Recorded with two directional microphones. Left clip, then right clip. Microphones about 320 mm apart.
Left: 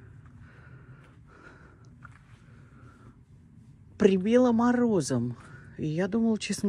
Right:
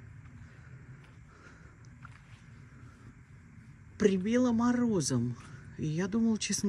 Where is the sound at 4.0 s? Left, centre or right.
Centre.